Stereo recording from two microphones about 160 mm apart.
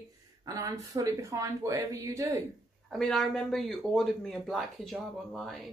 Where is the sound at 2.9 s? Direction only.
5° left (ahead or behind).